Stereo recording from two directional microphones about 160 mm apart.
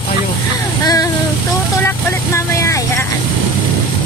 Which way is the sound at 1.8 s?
20° left (ahead or behind).